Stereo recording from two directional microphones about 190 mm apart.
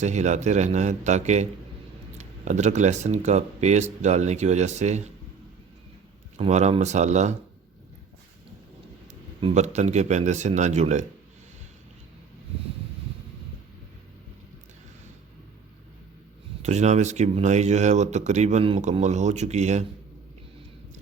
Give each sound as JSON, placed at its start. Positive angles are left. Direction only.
{"t": 0.0, "sound": "speech", "side_deg": -40}
{"t": 6.3, "sound": "speech", "side_deg": -35}
{"t": 9.4, "sound": "speech", "side_deg": -35}
{"t": 16.6, "sound": "speech", "side_deg": -35}